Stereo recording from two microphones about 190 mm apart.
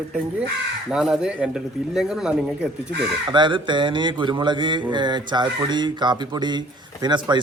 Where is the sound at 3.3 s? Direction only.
25° right (ahead or behind).